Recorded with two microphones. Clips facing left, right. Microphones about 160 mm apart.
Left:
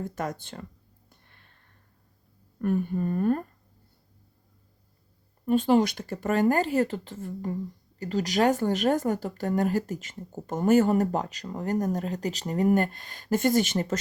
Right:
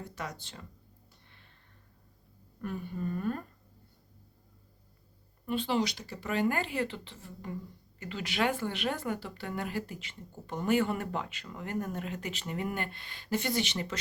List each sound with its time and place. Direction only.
0.0 s speech: 50° left (ahead or behind)
1.1 s a sound: 50° left (ahead or behind)
2.6 s speech: 50° left (ahead or behind)
5.5 s speech: 45° left (ahead or behind)
7.9 s speech: 40° left (ahead or behind)